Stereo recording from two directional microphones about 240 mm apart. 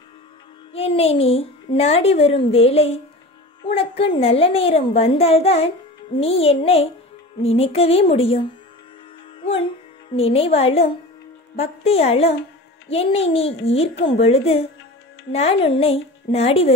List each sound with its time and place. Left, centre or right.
0.7 s a woman's voice: left
9.4 s music: left
10.1 s a woman's voice: left